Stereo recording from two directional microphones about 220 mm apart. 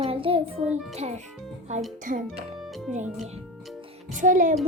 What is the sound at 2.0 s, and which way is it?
Speech, 35° right (ahead or behind).